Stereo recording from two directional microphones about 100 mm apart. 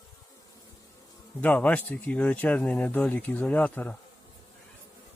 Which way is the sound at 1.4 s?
15° left (ahead or behind).